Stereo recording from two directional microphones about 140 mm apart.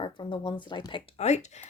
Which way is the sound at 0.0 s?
35° left (ahead or behind).